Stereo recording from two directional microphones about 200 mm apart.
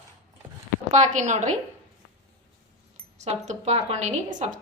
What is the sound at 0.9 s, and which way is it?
Speech, 35° right (ahead or behind).